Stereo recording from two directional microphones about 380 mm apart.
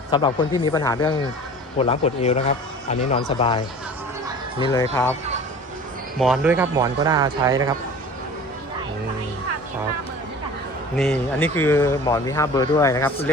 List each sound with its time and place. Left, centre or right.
0.1 s speech: centre
4.6 s speech: centre
6.1 s speech: centre
10.9 s speech: centre